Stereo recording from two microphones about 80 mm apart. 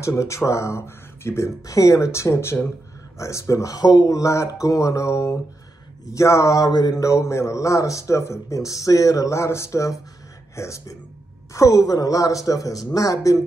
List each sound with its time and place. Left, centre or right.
0.0 s speech: left
3.7 s speech: left
4.2 s speech: left
6.6 s speech: left
7.0 s speech: left